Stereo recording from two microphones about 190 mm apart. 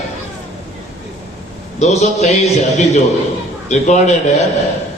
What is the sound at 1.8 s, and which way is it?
A man's voice, 35° left (ahead or behind).